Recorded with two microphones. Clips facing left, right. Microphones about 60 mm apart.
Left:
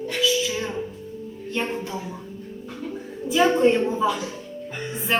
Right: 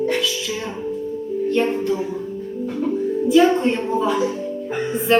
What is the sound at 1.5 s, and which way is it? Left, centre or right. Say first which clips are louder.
Speech: right 7 dB; centre.